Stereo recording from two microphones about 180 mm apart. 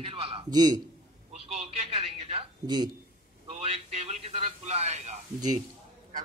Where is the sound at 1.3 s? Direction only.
35° right (ahead or behind).